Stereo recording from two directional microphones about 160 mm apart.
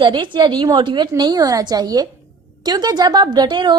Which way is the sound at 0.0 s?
30° right (ahead or behind).